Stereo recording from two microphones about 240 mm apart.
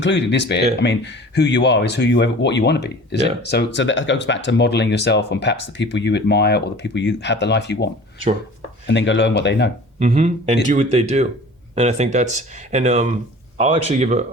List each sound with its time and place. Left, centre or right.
0.0 s speech: left
8.9 s speech: left
10.0 s speech: right